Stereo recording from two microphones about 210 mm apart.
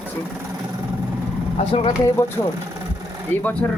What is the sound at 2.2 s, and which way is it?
Speech, 10° left (ahead or behind).